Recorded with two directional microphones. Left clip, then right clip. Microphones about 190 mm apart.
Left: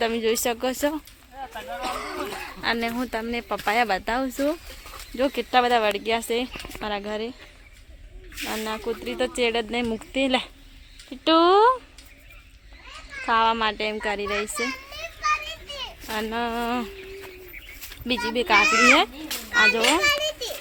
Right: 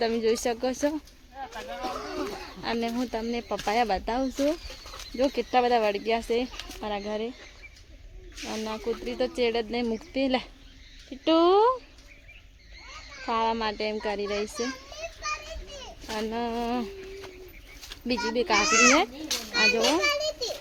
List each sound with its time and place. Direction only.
0.0 s speech: centre (ahead or behind)
1.4 s a sound: 40° left (ahead or behind)
2.6 s speech: centre (ahead or behind)
8.4 s speech: 15° left (ahead or behind)
13.2 s speech: 5° left (ahead or behind)
15.8 s a child's voice: centre (ahead or behind)
18.1 s speech: centre (ahead or behind)
18.7 s a child's voice: 60° right (ahead or behind)
18.9 s a child's voice: centre (ahead or behind)
20.1 s children playing: 40° right (ahead or behind)